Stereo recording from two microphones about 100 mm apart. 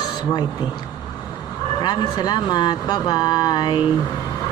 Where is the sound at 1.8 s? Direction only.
45° left (ahead or behind).